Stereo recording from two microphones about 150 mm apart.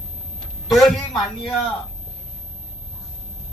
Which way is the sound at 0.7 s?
Centre (ahead or behind).